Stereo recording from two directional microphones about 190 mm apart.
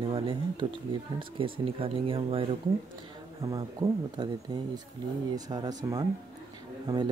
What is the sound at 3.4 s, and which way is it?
Speech, 15° right (ahead or behind).